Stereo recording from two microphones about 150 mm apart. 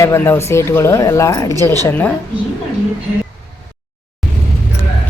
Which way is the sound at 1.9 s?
10° left (ahead or behind).